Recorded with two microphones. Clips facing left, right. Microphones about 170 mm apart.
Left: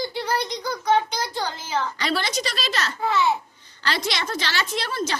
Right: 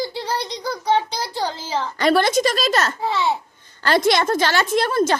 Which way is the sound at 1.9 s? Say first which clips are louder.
Right 9 dB; 50° right (ahead or behind).